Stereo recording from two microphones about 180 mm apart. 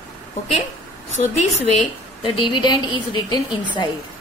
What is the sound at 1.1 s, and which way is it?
A woman's voice, 40° left (ahead or behind).